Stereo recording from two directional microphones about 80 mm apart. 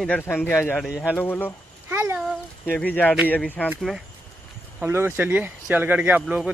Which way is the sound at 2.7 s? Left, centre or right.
Centre.